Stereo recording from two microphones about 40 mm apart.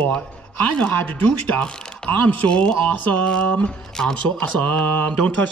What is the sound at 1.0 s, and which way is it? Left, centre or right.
Speech, left.